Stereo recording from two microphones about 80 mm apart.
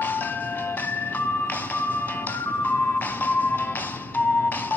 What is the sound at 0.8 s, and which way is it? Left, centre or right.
Music, left.